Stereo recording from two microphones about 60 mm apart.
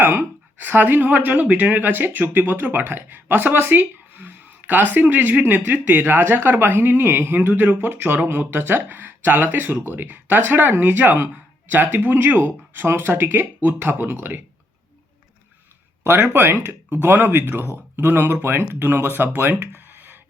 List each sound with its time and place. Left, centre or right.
0.0 s speech: right
16.0 s speech: right
19.3 s a sound: right